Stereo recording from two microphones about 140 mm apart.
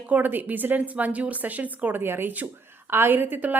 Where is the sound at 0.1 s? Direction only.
15° right (ahead or behind).